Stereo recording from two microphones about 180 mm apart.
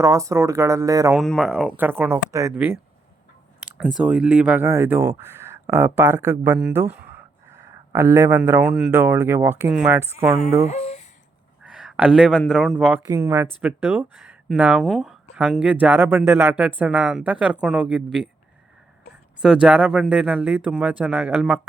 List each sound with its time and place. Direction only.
0.0 s speech: 15° right (ahead or behind)
1.1 s speech: centre (ahead or behind)
3.8 s speech: 5° right (ahead or behind)
6.6 s speech: 5° right (ahead or behind)
10.7 s speech: 35° left (ahead or behind)
11.6 s a sound: 5° right (ahead or behind)
12.5 s speech: centre (ahead or behind)
13.1 s speech: 15° right (ahead or behind)
19.4 s speech: 5° right (ahead or behind)